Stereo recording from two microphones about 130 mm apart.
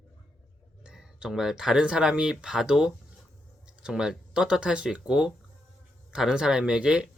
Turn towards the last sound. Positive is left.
turn(degrees=-5)  # may be behind; listen again after turning